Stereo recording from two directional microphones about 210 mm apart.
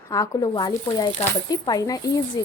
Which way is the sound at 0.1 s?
15° left (ahead or behind).